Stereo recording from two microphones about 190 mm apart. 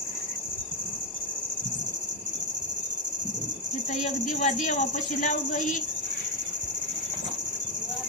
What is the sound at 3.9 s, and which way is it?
Speech, 40° left (ahead or behind).